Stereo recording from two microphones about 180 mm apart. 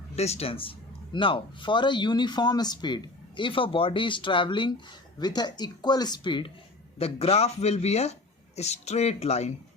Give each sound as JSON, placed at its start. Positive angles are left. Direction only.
{"t": 0.2, "sound": "speech", "side_deg": 35}